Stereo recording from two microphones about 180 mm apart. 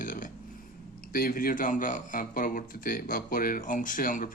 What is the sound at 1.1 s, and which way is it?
Speech, 55° left (ahead or behind).